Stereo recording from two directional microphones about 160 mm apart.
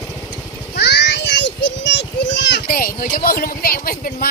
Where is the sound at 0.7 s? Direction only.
90° left.